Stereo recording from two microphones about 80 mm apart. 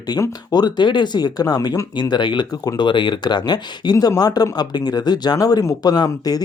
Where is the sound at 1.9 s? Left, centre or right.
Left.